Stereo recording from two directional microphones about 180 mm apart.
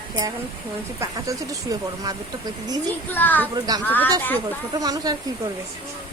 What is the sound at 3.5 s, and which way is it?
Speech, 20° right (ahead or behind).